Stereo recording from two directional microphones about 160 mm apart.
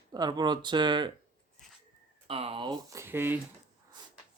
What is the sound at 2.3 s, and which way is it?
Speech, 35° right (ahead or behind).